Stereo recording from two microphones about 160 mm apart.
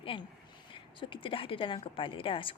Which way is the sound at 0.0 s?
30° left (ahead or behind).